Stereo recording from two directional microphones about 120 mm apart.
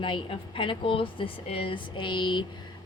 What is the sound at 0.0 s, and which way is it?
A woman's voice, 45° left (ahead or behind).